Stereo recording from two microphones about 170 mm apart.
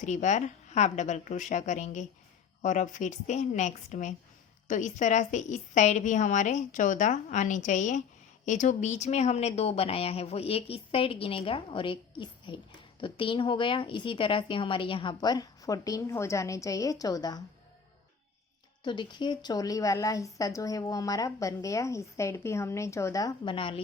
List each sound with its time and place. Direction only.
0.0 s a woman's voice: 45° left (ahead or behind); by 17.4 s 25° left (ahead or behind)
18.8 s a woman's voice: 25° left (ahead or behind)